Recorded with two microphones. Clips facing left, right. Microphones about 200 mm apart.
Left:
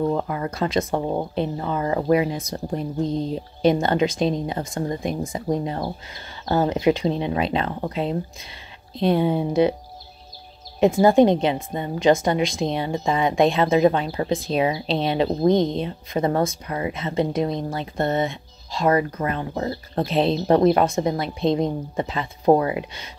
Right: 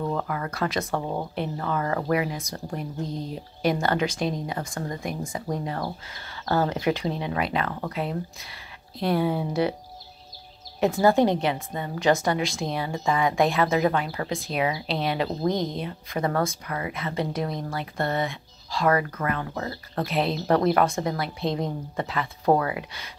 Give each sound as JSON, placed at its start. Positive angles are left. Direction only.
{"t": 0.0, "sound": "a woman's voice", "side_deg": 20}
{"t": 10.8, "sound": "a woman's voice", "side_deg": 20}